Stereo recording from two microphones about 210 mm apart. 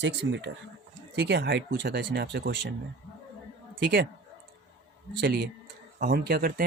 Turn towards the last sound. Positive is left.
turn(degrees=-45)  # may be behind; listen again after turning